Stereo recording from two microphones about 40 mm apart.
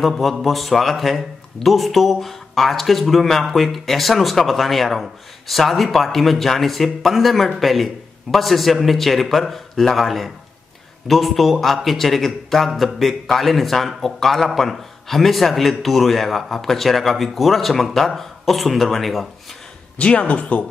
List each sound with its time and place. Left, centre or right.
0.2 s speech: centre
20.0 s speech: left